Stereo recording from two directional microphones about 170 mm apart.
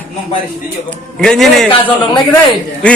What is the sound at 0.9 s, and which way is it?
Speech, 5° left (ahead or behind).